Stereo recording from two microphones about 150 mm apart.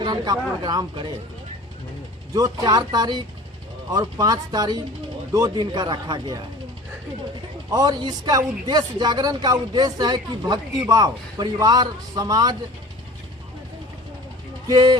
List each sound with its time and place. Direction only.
0.0 s speech: 30° right (ahead or behind)
2.3 s speech: 25° right (ahead or behind)
7.7 s speech: 25° right (ahead or behind)
14.7 s speech: 25° right (ahead or behind)